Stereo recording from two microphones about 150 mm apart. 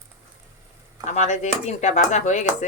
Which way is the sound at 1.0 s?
50° left (ahead or behind).